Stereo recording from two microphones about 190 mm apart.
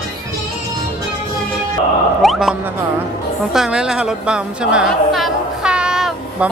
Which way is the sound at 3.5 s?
5° right (ahead or behind).